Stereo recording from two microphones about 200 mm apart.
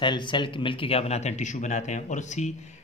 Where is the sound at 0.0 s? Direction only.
25° left (ahead or behind).